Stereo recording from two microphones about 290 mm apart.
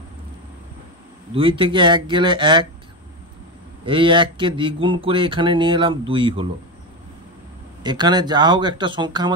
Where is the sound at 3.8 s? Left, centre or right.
Centre.